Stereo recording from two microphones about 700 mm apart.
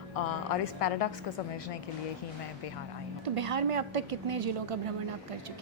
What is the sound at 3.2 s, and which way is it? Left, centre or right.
A woman's voice, right.